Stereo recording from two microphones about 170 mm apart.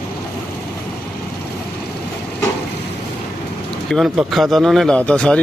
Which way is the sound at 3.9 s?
Centre (ahead or behind).